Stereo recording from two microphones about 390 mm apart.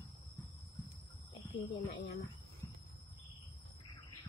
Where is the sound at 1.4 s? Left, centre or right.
Centre.